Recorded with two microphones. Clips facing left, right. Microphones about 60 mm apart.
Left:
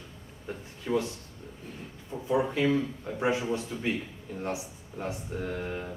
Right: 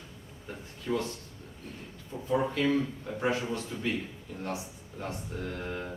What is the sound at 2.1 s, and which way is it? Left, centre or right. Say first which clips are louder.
Speech: left 2 dB; left.